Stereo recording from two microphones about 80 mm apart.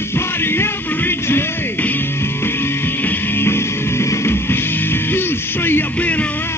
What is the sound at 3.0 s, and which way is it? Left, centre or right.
Music, left.